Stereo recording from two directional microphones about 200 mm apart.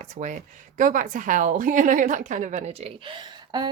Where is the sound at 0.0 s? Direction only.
40° right (ahead or behind).